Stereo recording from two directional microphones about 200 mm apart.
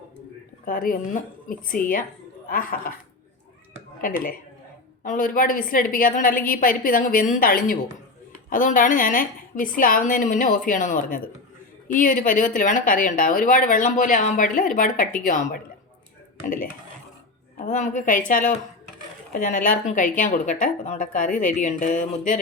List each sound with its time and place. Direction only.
0.6 s a woman's voice: 45° left (ahead or behind)
4.0 s a woman's voice: 45° left (ahead or behind)
17.6 s speech: 35° left (ahead or behind)